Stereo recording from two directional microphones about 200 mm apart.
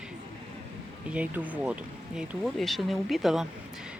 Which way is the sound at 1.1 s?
5° right (ahead or behind).